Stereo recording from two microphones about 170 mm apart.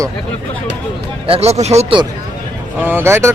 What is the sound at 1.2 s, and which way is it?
Speech, 35° right (ahead or behind).